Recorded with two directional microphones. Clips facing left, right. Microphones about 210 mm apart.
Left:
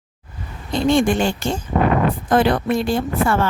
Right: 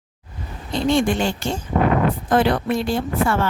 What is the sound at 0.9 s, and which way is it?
A woman's voice, 50° left (ahead or behind).